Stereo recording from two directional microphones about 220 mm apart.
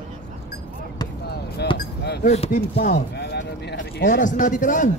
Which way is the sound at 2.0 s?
50° left (ahead or behind).